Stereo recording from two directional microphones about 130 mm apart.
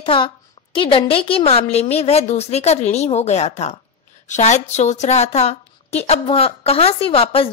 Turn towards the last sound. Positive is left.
turn(degrees=45)  # may be behind; listen again after turning